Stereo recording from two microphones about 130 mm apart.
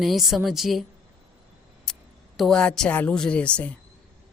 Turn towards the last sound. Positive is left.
turn(degrees=10)  # may be behind; listen again after turning